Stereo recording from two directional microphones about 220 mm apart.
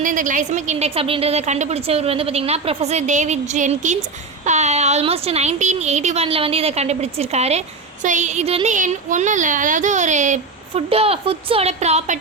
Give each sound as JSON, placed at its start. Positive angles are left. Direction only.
{"t": 0.0, "sound": "a woman's voice", "side_deg": -35}